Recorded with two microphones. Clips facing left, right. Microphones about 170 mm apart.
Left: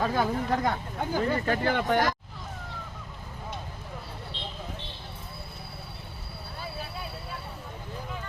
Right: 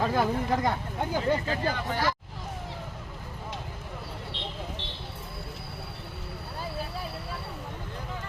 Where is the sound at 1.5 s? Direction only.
60° left (ahead or behind).